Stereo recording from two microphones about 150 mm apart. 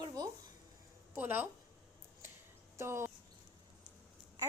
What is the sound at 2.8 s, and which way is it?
Speech, 15° right (ahead or behind).